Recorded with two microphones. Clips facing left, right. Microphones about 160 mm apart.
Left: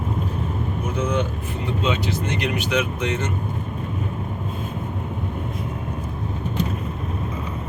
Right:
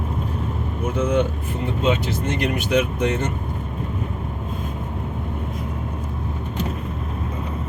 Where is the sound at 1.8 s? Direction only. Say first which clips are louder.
Right 3 dB; 50° right (ahead or behind).